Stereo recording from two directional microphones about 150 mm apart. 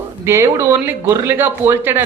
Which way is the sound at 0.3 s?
20° right (ahead or behind).